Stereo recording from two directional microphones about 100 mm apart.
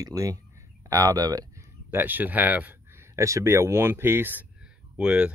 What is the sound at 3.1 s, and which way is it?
Speech, 30° right (ahead or behind).